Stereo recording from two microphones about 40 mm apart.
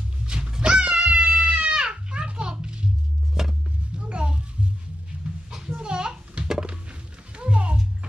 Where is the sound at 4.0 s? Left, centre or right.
Right.